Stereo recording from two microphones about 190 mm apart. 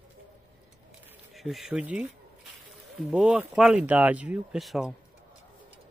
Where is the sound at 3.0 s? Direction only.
5° right (ahead or behind).